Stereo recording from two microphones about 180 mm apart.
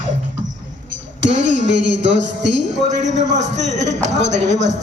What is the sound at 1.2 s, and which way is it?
A man's voice, 85° right.